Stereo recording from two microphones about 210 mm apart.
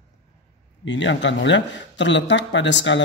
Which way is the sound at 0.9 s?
60° left (ahead or behind).